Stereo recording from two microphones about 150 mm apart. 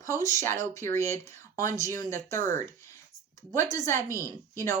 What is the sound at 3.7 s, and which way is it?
A woman's voice, 20° left (ahead or behind).